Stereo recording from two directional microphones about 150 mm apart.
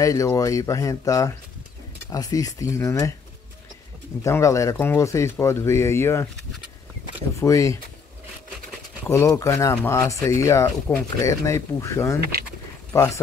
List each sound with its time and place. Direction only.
0.0 s speech: 20° left (ahead or behind)
4.2 s speech: 20° left (ahead or behind)
7.3 s speech: 20° left (ahead or behind)
9.1 s speech: 20° left (ahead or behind)